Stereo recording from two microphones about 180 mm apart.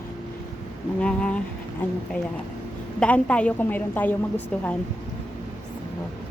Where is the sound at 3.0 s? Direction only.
5° left (ahead or behind).